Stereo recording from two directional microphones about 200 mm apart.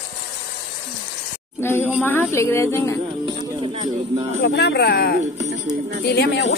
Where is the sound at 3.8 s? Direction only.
30° right (ahead or behind).